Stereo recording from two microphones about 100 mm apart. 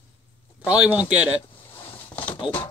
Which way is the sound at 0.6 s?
10° right (ahead or behind).